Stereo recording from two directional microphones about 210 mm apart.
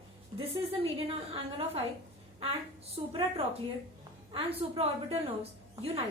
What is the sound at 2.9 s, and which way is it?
A woman's voice, 25° right (ahead or behind).